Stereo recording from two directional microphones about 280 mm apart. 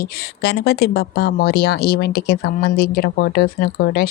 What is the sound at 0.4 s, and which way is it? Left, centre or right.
A woman's voice, left.